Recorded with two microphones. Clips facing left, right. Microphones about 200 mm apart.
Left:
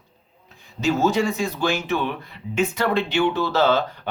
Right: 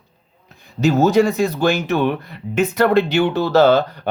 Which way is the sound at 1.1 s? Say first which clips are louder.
Right 7 dB; 65° right (ahead or behind).